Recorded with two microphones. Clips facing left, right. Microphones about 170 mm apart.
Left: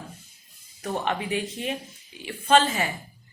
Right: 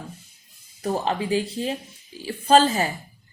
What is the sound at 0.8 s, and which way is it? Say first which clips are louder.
A woman's voice: right 3 dB; 30° right (ahead or behind).